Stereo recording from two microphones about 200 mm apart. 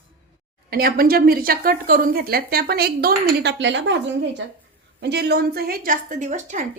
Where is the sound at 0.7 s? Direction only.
50° right (ahead or behind).